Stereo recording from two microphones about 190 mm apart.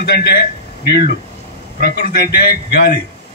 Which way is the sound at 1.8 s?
55° left (ahead or behind).